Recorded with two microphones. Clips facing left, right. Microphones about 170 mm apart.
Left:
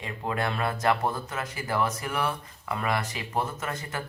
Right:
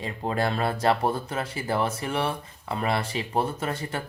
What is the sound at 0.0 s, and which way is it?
Speech, 35° right (ahead or behind).